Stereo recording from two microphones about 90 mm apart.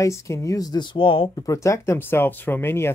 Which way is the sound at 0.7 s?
75° left (ahead or behind).